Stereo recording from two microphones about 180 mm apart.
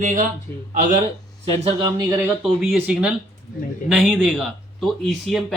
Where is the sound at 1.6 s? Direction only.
25° right (ahead or behind).